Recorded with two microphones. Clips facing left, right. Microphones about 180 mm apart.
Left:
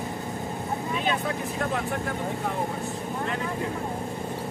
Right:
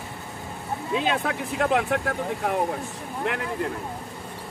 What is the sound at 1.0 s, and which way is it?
Speech, 85° right.